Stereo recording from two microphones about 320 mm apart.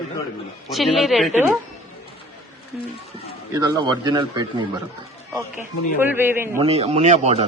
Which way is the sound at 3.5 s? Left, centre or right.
Centre.